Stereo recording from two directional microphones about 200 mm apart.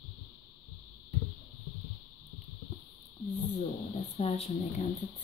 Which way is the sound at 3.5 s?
30° left (ahead or behind).